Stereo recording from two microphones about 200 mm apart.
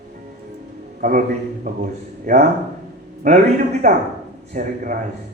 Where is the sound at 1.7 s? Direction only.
45° right (ahead or behind).